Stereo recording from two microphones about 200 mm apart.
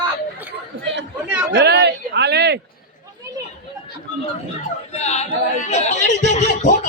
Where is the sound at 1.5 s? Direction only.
55° right (ahead or behind).